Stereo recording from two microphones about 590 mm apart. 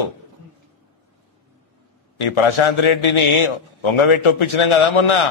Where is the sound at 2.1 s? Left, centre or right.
Left.